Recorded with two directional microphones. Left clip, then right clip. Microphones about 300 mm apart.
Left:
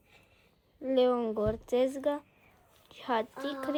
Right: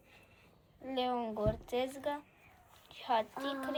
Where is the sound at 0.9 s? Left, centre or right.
Left.